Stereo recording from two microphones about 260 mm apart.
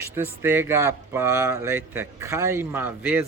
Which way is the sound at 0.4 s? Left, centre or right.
Centre.